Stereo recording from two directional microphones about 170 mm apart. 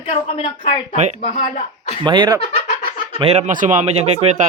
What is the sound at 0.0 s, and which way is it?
Speech, 40° left (ahead or behind).